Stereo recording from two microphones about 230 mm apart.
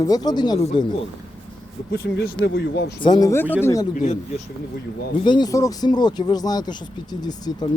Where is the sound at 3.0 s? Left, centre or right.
Centre.